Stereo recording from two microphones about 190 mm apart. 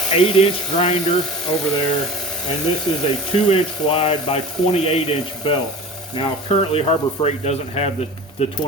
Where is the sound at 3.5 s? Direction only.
30° left (ahead or behind).